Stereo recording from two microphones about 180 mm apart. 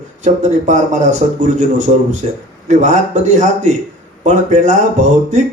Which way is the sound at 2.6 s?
40° right (ahead or behind).